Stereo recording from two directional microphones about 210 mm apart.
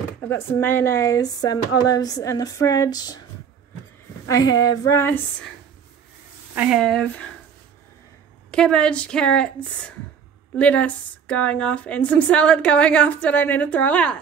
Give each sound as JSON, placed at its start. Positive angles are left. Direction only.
{"t": 0.3, "sound": "a woman's voice", "side_deg": 10}
{"t": 4.3, "sound": "a woman's voice", "side_deg": 15}
{"t": 6.5, "sound": "speech", "side_deg": -5}
{"t": 8.5, "sound": "a woman's voice", "side_deg": 5}